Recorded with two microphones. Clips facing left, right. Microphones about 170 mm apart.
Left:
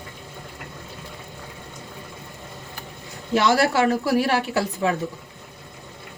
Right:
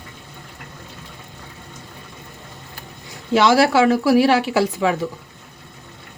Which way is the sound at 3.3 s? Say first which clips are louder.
Right 4 dB; 90° right.